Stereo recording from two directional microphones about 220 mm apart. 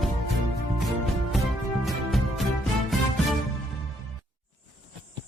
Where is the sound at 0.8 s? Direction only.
Centre (ahead or behind).